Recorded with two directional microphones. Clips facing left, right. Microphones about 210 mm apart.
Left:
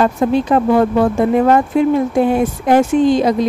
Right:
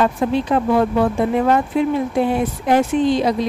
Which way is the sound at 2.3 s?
45° left (ahead or behind).